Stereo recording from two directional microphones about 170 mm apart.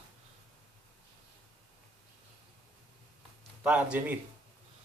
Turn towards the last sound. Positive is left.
turn(degrees=-10)  # may be behind; listen again after turning